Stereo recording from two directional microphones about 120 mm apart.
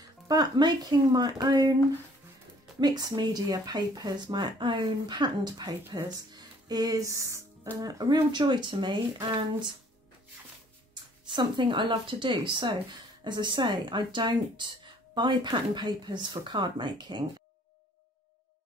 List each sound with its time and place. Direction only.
0.3 s speech: 35° right (ahead or behind)
2.8 s speech: 35° right (ahead or behind)
6.3 s music: 30° right (ahead or behind)
7.8 s speech: 35° right (ahead or behind)
11.2 s speech: 40° right (ahead or behind)